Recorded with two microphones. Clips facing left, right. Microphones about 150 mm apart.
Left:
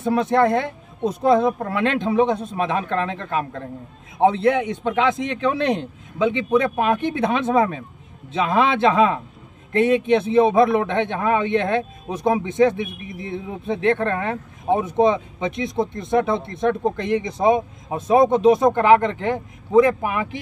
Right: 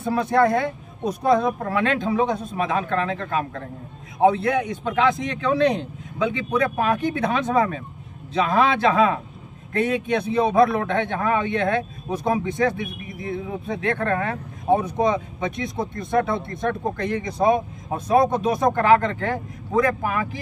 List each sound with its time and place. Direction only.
0.0 s a man's voice: 20° left (ahead or behind)